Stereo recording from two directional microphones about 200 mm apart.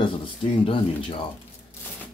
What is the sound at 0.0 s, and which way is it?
Speech, 25° left (ahead or behind).